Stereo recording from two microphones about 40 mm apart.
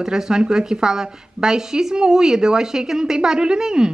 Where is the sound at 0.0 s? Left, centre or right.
Centre.